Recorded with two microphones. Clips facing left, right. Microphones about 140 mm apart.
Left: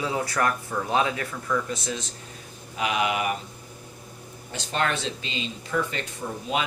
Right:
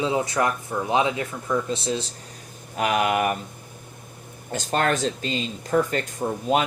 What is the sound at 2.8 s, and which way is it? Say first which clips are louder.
Speech: right 4 dB; 50° right (ahead or behind).